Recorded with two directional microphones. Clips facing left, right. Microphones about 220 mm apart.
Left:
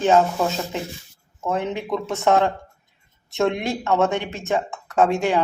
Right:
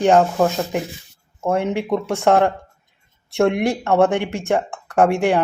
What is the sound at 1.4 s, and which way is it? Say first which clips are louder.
Speech: right 5 dB; 10° right (ahead or behind).